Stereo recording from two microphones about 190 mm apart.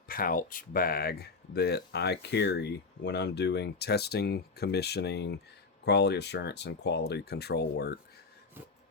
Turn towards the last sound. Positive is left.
turn(degrees=60)  # may be behind; listen again after turning